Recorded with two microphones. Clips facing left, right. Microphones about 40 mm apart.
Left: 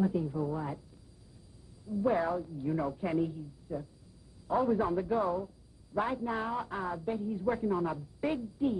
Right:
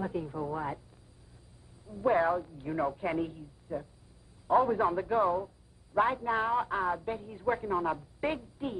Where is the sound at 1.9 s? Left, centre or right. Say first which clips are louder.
Right 3 dB; right.